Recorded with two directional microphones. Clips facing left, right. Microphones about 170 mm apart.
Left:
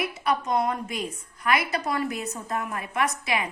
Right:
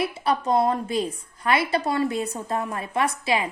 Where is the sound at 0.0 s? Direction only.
30° right (ahead or behind).